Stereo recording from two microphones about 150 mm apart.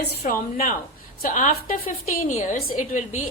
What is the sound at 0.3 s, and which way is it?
A woman's voice, 65° left (ahead or behind).